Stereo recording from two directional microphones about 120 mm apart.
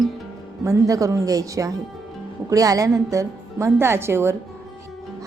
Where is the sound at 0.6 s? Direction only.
25° right (ahead or behind).